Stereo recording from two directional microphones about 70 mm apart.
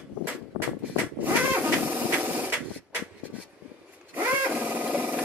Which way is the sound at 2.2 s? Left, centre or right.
Right.